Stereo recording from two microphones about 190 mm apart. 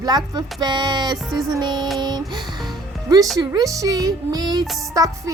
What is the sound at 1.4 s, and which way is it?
Speech, 25° right (ahead or behind).